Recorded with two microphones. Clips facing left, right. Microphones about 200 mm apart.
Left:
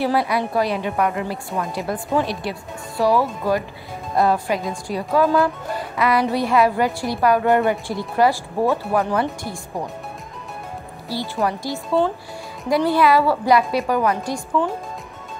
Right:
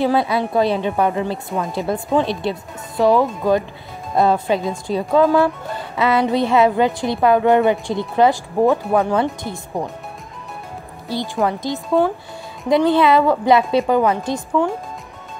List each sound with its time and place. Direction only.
0.0 s speech: 25° right (ahead or behind)
11.4 s speech: 20° right (ahead or behind)